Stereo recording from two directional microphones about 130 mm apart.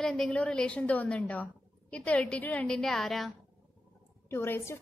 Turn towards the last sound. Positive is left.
turn(degrees=20)  # may be behind; listen again after turning